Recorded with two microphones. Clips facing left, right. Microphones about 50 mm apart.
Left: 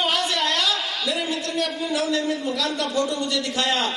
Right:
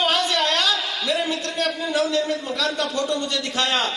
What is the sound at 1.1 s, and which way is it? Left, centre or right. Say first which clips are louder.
A man's voice: right 3 dB; right.